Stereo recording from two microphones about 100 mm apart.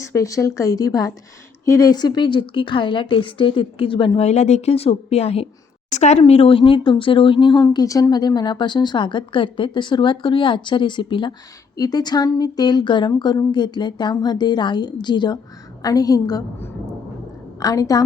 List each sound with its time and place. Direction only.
0.0 s speech: 30° left (ahead or behind)
1.9 s speech: 45° left (ahead or behind)
7.7 s speech: 40° left (ahead or behind)
17.6 s speech: 35° left (ahead or behind)